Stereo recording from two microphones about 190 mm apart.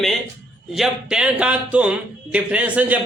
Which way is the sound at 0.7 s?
5° right (ahead or behind).